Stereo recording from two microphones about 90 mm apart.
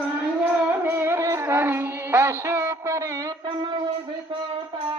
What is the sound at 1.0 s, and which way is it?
Music, 30° right (ahead or behind).